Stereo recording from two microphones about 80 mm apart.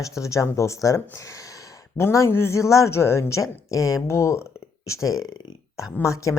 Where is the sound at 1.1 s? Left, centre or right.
Left.